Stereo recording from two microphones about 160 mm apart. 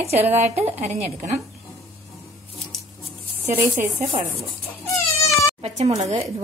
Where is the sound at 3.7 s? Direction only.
50° right (ahead or behind).